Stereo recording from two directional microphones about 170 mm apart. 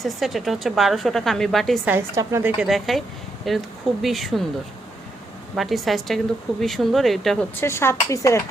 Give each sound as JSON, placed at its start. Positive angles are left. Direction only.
{"t": 0.0, "sound": "a woman's voice", "side_deg": 0}
{"t": 1.9, "sound": "a woman's voice", "side_deg": -15}
{"t": 2.6, "sound": "a woman's voice", "side_deg": 0}
{"t": 5.5, "sound": "a woman's voice", "side_deg": 0}
{"t": 7.6, "sound": "speech", "side_deg": 15}